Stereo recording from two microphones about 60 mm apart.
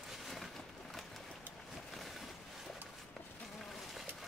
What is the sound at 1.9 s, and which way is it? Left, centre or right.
Boat, centre.